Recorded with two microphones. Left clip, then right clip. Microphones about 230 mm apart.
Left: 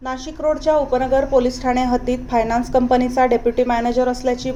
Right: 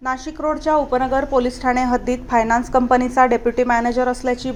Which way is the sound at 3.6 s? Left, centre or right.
Right.